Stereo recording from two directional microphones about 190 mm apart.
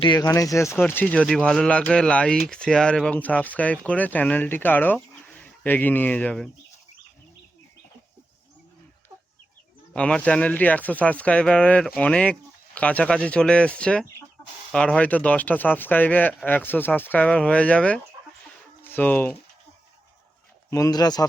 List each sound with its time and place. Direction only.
0.0 s speech: 20° left (ahead or behind); by 6.5 s 5° left (ahead or behind)
9.9 s speech: 5° left (ahead or behind)
20.7 s speech: 15° left (ahead or behind)